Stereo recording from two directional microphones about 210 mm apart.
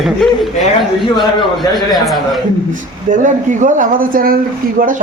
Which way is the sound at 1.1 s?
20° left (ahead or behind).